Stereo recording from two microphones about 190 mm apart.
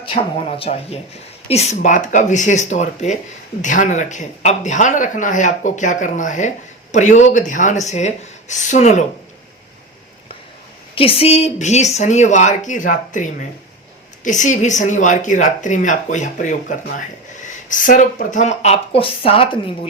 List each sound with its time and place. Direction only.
0.0 s speech: 30° left (ahead or behind)
10.9 s speech: 30° left (ahead or behind)